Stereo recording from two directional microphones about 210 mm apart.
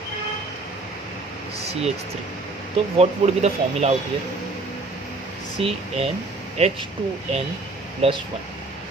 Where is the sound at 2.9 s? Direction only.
30° right (ahead or behind).